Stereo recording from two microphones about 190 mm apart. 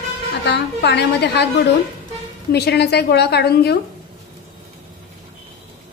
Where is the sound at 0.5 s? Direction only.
60° left (ahead or behind).